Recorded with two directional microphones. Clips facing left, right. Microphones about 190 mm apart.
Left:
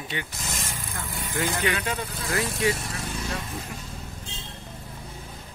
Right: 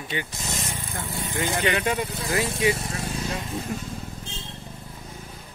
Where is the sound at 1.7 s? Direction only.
20° right (ahead or behind).